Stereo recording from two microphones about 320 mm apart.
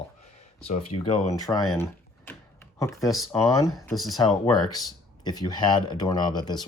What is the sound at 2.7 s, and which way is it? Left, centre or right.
Speech, centre.